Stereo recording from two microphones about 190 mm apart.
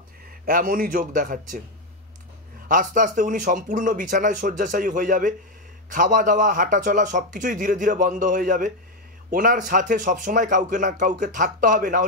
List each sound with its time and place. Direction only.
0.5 s speech: 45° right (ahead or behind)
2.7 s speech: 45° right (ahead or behind)